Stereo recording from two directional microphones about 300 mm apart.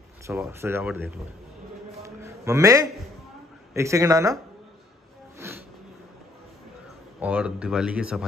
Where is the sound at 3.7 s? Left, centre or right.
Centre.